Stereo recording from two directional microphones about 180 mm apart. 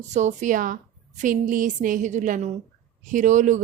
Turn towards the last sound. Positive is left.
turn(degrees=-45)  # may be behind; listen again after turning